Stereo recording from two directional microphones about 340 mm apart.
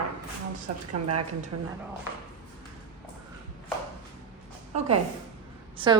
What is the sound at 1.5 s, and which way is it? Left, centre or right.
Speech, right.